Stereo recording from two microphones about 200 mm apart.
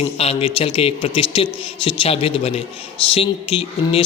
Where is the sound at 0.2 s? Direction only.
30° left (ahead or behind).